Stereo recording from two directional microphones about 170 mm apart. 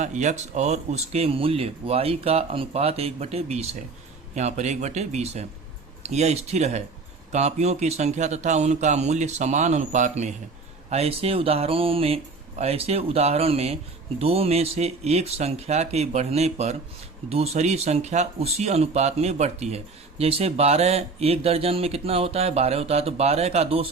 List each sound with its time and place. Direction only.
0.0 s speech: 45° right (ahead or behind)